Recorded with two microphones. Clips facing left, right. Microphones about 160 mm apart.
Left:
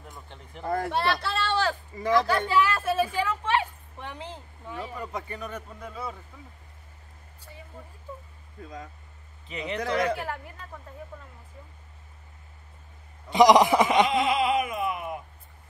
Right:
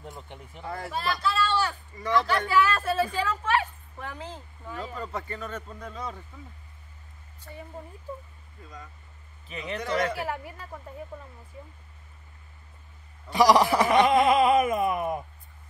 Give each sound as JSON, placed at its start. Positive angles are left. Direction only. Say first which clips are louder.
{"t": 0.0, "sound": "speech", "louder": "right 4 dB", "side_deg": -20}
{"t": 0.7, "sound": "speech", "louder": "left 7 dB", "side_deg": 50}
{"t": 0.9, "sound": "speech", "louder": "left 1 dB", "side_deg": 65}
{"t": 2.3, "sound": "a woman's voice", "louder": "even", "side_deg": 20}
{"t": 9.5, "sound": "speech", "louder": "left 1 dB", "side_deg": 20}
{"t": 10.1, "sound": "speech", "louder": "right 2 dB", "side_deg": -5}
{"t": 13.3, "sound": "a woman's voice", "louder": "left 3 dB", "side_deg": 20}
{"t": 14.0, "sound": "a sound", "louder": "right 4 dB", "side_deg": -45}